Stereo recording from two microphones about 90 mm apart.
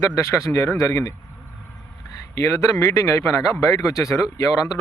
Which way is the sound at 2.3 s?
35° left (ahead or behind).